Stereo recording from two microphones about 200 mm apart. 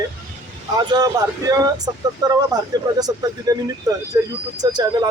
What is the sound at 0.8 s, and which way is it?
Speech, 20° right (ahead or behind).